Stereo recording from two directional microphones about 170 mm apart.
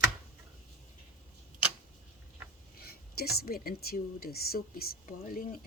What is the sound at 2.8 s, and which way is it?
Speech, 65° left (ahead or behind).